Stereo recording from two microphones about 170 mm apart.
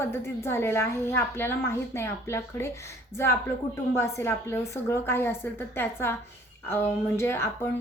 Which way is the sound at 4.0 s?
15° left (ahead or behind).